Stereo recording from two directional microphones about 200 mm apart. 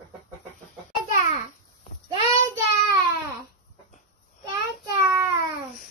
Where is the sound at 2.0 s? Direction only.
20° right (ahead or behind).